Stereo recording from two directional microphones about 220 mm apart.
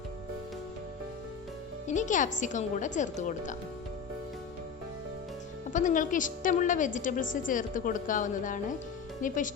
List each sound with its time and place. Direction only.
1.9 s a woman's voice: 35° left (ahead or behind)
5.7 s a woman's voice: 35° left (ahead or behind)